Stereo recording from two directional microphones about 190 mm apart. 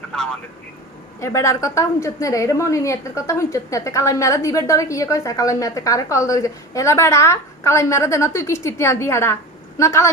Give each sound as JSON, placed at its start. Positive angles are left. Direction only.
{"t": 1.2, "sound": "a woman's voice", "side_deg": 15}